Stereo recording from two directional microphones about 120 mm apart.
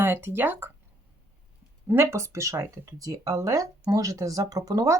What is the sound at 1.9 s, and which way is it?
Speech, 20° right (ahead or behind).